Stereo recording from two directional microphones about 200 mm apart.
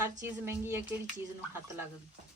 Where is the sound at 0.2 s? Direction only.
10° right (ahead or behind).